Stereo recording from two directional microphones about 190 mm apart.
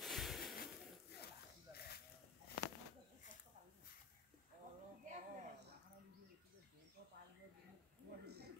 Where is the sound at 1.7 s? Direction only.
55° left (ahead or behind).